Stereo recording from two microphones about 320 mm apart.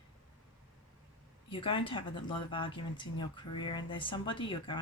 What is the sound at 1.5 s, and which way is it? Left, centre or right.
Speech, centre.